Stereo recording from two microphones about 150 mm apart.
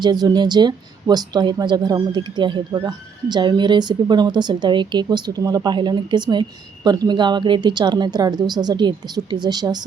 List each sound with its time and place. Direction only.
0.0 s speech: 25° right (ahead or behind)